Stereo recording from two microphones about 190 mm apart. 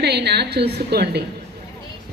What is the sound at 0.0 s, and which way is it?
A woman's voice, 60° right (ahead or behind).